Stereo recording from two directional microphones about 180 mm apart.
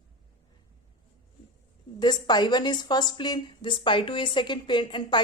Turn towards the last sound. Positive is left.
turn(degrees=25)  # may be behind; listen again after turning